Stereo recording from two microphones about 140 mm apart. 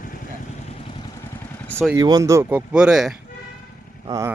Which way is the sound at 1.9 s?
25° right (ahead or behind).